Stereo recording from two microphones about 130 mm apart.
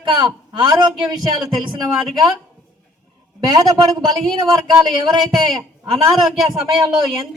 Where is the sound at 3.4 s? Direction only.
30° right (ahead or behind).